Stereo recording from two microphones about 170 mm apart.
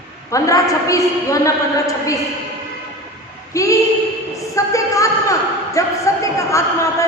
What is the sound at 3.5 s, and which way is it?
Speech, 20° left (ahead or behind).